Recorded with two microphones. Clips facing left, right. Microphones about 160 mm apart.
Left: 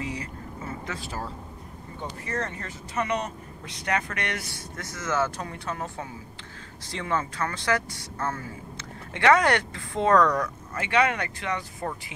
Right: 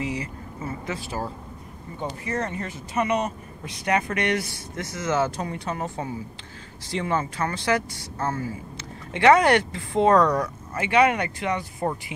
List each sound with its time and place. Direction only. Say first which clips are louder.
0.0 s vehicle: right 4 dB; 10° right (ahead or behind)
0.8 s speech: right 6 dB; 15° right (ahead or behind)
10.7 s speech: right 5 dB; 15° right (ahead or behind)